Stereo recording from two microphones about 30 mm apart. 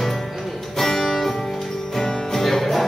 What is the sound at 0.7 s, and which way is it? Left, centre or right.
Music, centre.